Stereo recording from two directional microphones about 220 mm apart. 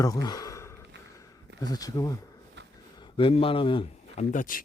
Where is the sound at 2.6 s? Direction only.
50° right (ahead or behind).